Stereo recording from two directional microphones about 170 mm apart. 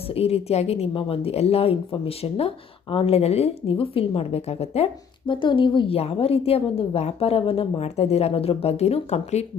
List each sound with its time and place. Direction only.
0.1 s a woman's voice: 35° left (ahead or behind)